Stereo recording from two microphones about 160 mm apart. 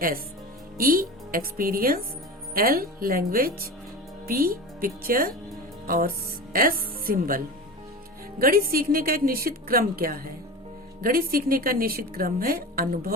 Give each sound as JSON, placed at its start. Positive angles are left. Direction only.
{"t": 0.8, "sound": "a woman's voice", "side_deg": -65}
{"t": 6.5, "sound": "a woman's voice", "side_deg": -65}